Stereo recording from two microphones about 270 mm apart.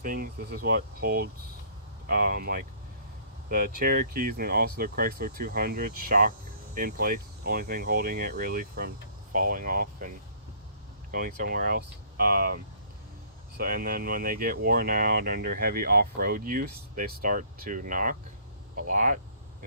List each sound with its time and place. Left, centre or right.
0.0 s speech: right
11.3 s speech: right
13.6 s speech: right